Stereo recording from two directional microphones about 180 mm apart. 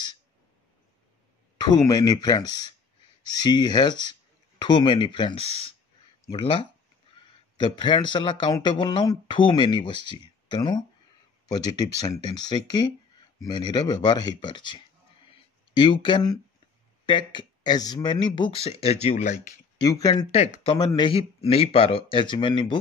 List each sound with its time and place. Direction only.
1.6 s speech: 20° left (ahead or behind); by 19.3 s 40° left (ahead or behind)
19.8 s speech: 20° left (ahead or behind)
20.2 s speech: 35° left (ahead or behind)
20.7 s speech: 25° left (ahead or behind)